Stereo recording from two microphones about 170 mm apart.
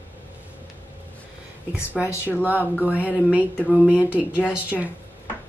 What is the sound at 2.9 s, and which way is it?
Speech, 10° right (ahead or behind).